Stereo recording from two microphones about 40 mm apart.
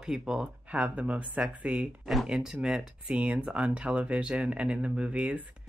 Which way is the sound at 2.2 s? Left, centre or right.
Centre.